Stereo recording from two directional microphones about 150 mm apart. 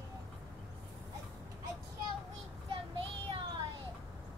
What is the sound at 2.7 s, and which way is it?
Child singing, 35° right (ahead or behind).